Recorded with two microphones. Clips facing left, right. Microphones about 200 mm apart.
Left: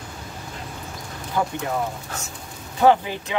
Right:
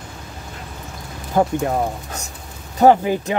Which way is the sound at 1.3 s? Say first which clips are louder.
Right 7 dB; 45° right (ahead or behind).